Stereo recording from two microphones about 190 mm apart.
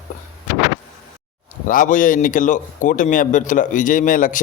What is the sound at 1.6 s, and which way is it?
Speech, 45° left (ahead or behind).